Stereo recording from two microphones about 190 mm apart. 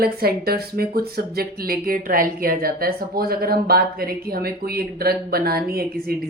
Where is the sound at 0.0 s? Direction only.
55° right (ahead or behind).